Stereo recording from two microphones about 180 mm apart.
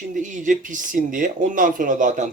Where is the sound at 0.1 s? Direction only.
45° right (ahead or behind).